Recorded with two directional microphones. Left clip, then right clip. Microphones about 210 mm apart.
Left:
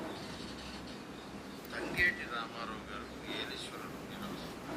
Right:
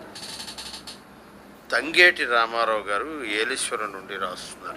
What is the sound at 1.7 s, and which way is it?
Speech, 60° right (ahead or behind).